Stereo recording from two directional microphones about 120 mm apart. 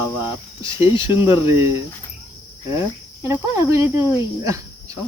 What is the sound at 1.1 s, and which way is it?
Speech, 20° right (ahead or behind).